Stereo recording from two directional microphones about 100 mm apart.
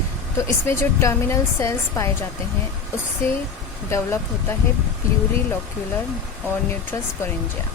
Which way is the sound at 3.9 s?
25° left (ahead or behind).